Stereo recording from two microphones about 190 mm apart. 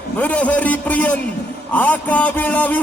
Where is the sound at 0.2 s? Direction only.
5° left (ahead or behind).